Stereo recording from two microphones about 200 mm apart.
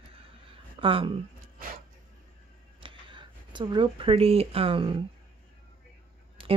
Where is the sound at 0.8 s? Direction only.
25° right (ahead or behind).